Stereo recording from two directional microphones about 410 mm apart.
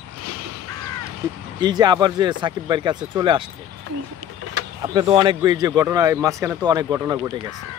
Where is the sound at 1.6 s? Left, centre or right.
Centre.